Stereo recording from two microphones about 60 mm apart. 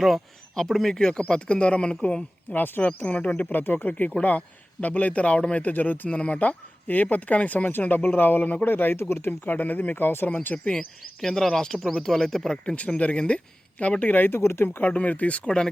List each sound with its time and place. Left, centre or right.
0.0 s speech: centre; by 9.3 s left
9.4 s speech: left
10.4 s speech: left
11.2 s speech: centre
12.7 s speech: left
14.8 s speech: left
15.4 s speech: centre